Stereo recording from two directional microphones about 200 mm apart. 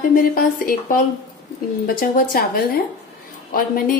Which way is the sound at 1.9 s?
45° left (ahead or behind).